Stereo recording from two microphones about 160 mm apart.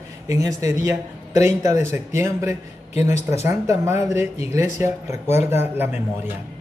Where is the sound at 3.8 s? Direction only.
15° right (ahead or behind).